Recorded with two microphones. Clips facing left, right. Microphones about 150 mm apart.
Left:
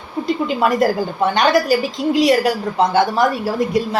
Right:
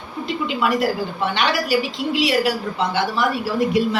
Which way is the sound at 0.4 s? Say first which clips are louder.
Left 3 dB; 45° left (ahead or behind).